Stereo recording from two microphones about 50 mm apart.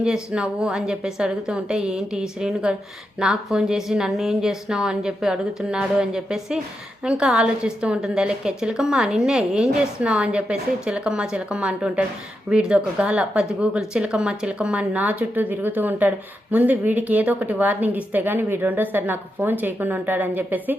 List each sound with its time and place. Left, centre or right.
0.0 s a woman's voice: centre; by 20.7 s right